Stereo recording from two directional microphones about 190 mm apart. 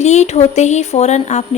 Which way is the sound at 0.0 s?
35° left (ahead or behind).